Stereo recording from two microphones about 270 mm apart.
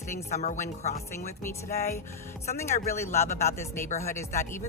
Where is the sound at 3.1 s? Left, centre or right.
Left.